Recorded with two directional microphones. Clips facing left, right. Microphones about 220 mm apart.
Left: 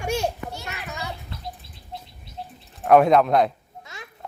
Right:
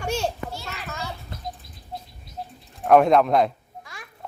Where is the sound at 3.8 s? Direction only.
25° left (ahead or behind).